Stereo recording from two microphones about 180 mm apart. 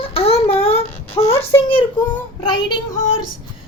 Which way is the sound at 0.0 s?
30° left (ahead or behind).